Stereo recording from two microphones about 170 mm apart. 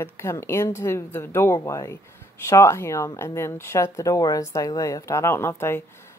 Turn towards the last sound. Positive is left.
turn(degrees=15)  # may be behind; listen again after turning